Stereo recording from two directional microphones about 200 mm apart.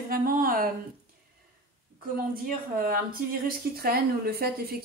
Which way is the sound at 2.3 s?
45° right (ahead or behind).